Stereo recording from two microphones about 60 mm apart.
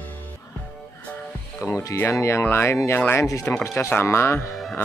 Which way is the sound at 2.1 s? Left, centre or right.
Left.